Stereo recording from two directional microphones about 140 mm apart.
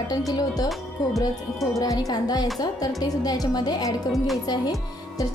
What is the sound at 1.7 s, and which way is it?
A woman's voice, 25° left (ahead or behind).